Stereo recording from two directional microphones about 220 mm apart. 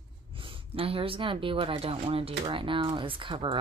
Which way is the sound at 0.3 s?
25° right (ahead or behind).